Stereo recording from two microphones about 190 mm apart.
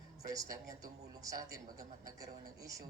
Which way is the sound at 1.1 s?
15° right (ahead or behind).